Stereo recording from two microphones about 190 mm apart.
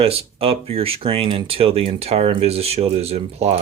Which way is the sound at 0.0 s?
30° right (ahead or behind).